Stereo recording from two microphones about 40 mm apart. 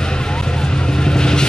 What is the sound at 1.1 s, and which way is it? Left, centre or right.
Vehicle, centre.